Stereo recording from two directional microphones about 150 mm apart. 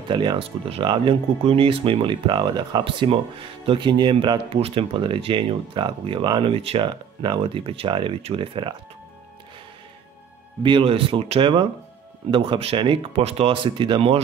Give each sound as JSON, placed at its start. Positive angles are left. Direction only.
{"t": 0.1, "sound": "speech", "side_deg": -30}
{"t": 10.6, "sound": "speech", "side_deg": -35}